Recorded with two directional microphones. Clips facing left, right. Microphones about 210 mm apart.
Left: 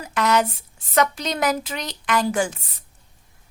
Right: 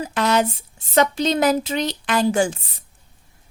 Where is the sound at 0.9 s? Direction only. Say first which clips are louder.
Right 4 dB; 30° right (ahead or behind).